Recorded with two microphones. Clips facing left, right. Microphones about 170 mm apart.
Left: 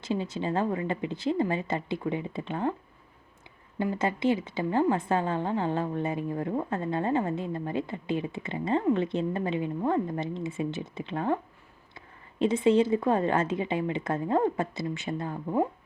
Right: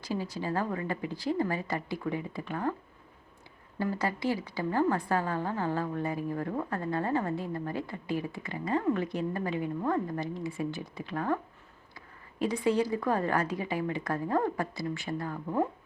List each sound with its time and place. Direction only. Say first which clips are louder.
0.0 s a woman's voice: left 3 dB; 25° left (ahead or behind)
3.8 s a woman's voice: left 3 dB; 20° left (ahead or behind)
12.4 s a woman's voice: left 5 dB; 25° left (ahead or behind)